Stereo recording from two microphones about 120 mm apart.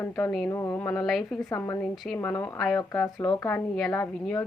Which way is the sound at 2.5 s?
5° left (ahead or behind).